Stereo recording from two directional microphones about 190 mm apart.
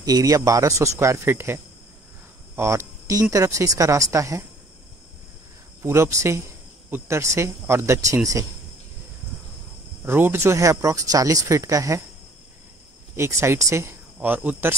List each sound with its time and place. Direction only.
0.0 s speech: 20° right (ahead or behind)
5.8 s speech: 15° right (ahead or behind)
10.0 s speech: 10° right (ahead or behind)
13.1 s speech: 15° right (ahead or behind)